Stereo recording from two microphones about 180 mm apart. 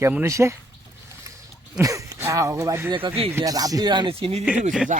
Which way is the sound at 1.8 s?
15° right (ahead or behind).